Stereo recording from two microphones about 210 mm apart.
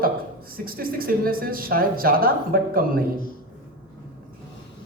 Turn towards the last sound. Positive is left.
turn(degrees=-45)  # may be behind; listen again after turning